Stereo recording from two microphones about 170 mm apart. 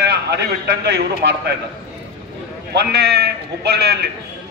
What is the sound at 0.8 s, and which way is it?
Speech, 80° right.